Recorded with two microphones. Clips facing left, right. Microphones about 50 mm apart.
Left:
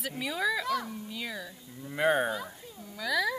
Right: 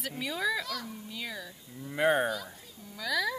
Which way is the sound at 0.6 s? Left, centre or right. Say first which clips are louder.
Left 6 dB; left.